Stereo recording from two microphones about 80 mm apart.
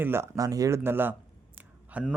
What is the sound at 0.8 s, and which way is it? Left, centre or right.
Speech, right.